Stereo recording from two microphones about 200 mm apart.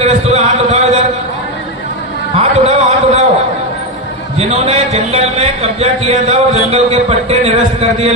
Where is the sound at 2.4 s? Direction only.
30° right (ahead or behind).